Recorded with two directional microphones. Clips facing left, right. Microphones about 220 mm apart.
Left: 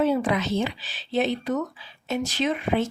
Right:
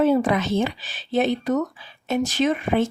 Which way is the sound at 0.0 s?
45° right (ahead or behind).